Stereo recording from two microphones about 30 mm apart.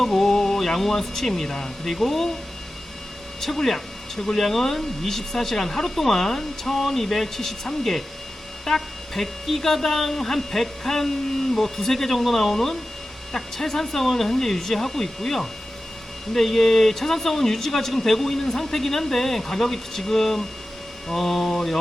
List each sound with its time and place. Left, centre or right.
0.0 s speech: centre
3.4 s speech: centre